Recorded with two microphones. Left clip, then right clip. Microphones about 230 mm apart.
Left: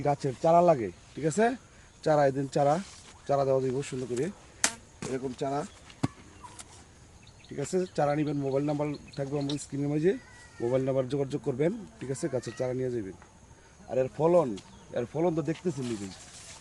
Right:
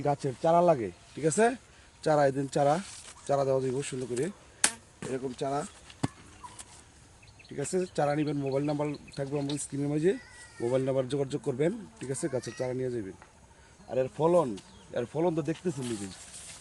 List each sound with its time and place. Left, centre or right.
0.0 s speech: centre
1.2 s speech: centre
2.0 s speech: centre
4.7 s chop: centre
5.1 s speech: centre
7.5 s speech: centre